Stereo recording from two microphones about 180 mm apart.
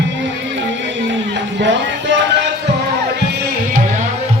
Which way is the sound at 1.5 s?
90° right.